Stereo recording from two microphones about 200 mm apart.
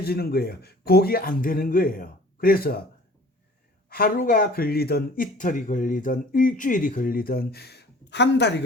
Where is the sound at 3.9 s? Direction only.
45° left (ahead or behind).